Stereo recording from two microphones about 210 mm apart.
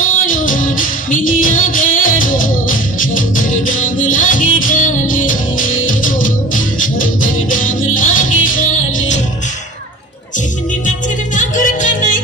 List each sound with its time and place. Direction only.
0.0 s music: 40° left (ahead or behind)
11.3 s music: 40° left (ahead or behind)